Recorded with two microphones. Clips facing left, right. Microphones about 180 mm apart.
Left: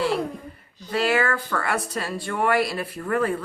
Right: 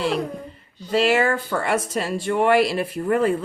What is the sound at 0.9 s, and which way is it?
Speech, 25° right (ahead or behind).